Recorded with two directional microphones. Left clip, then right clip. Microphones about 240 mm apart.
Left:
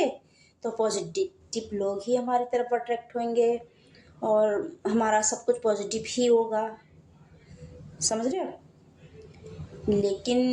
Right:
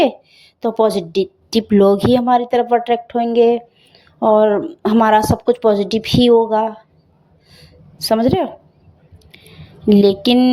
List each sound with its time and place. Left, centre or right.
0.0 s speech: right
8.0 s speech: right
9.9 s speech: right